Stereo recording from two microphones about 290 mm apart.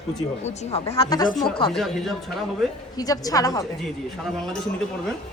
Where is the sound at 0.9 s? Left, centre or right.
Centre.